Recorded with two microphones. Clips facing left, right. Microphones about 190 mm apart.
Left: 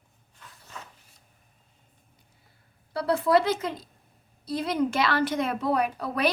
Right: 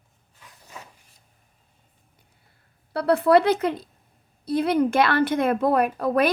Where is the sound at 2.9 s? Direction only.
60° right (ahead or behind).